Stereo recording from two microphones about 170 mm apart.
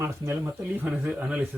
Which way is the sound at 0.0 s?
15° right (ahead or behind).